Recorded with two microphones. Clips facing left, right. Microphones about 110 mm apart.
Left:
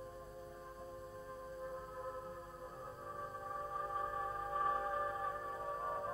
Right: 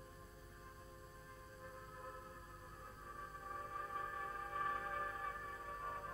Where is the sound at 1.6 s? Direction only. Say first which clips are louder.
Left 7 dB; 25° left (ahead or behind).